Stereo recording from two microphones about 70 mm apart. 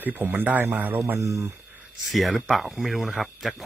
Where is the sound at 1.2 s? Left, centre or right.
Right.